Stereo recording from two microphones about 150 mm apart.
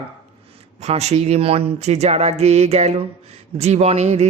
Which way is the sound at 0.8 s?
45° right (ahead or behind).